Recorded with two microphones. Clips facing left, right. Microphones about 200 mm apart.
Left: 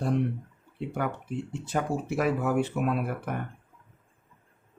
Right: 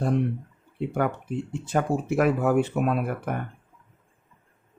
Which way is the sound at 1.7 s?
55° right (ahead or behind).